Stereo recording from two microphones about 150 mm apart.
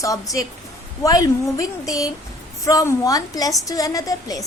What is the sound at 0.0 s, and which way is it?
A woman's voice, 20° left (ahead or behind).